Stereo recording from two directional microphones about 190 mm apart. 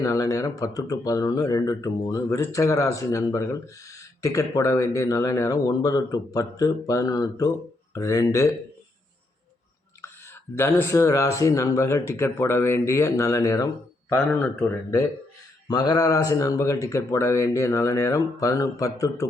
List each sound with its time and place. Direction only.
0.0 s speech: 15° left (ahead or behind)
10.6 s speech: 15° left (ahead or behind)